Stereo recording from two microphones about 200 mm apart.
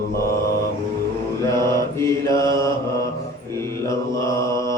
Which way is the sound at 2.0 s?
15° left (ahead or behind).